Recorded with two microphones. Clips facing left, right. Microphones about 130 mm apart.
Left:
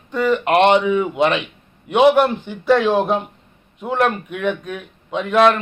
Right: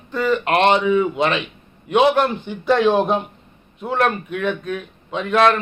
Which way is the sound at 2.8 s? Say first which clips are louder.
Right 1 dB; 5° left (ahead or behind).